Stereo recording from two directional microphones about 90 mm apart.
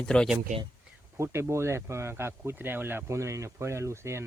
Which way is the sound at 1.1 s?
30° right (ahead or behind).